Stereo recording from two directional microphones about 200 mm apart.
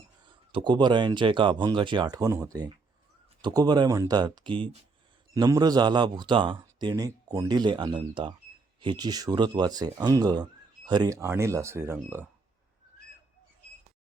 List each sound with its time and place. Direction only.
0.3 s speech: 25° right (ahead or behind)